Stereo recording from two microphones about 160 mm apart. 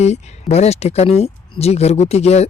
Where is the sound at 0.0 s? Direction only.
45° left (ahead or behind).